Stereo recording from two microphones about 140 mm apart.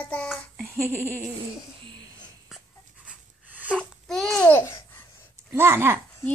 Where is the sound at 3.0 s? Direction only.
10° right (ahead or behind).